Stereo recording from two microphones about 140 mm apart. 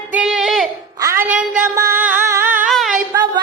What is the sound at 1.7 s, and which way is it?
Music, 20° right (ahead or behind).